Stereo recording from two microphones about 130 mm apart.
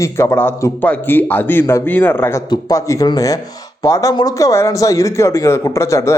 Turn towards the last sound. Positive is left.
turn(degrees=20)  # may be behind; listen again after turning